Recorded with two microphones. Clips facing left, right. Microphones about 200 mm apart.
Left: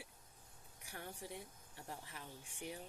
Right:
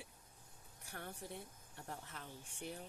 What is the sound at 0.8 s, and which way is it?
A woman's voice, 15° left (ahead or behind).